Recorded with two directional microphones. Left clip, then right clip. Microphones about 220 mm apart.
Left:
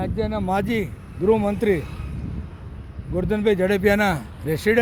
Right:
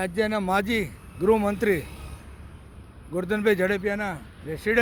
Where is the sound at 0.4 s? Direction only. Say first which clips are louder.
Left 1 dB; 10° right (ahead or behind).